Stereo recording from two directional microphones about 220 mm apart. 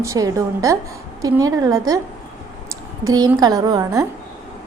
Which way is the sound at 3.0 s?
15° right (ahead or behind).